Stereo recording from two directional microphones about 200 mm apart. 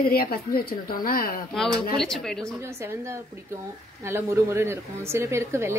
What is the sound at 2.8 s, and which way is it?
Speech, 15° right (ahead or behind).